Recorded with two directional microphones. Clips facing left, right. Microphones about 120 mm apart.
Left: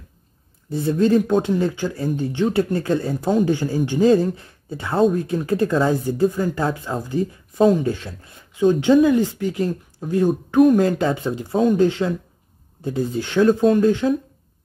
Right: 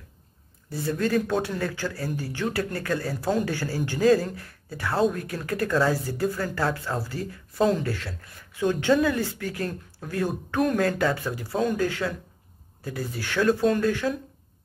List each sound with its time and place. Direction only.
0.7 s speech: 20° left (ahead or behind)